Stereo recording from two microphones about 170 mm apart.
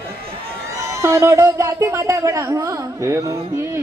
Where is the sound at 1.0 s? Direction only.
15° right (ahead or behind).